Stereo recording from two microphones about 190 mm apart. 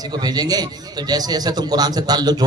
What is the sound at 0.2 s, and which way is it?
A man's voice, 20° right (ahead or behind).